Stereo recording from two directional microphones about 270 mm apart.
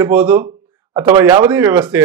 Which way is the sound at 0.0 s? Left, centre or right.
Centre.